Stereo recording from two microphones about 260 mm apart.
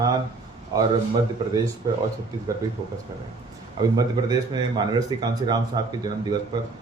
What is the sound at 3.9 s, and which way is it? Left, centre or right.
Speech, centre.